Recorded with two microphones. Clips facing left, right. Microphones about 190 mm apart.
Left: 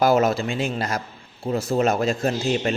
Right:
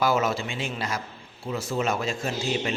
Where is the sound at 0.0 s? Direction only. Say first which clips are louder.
Left 6 dB; 40° left (ahead or behind).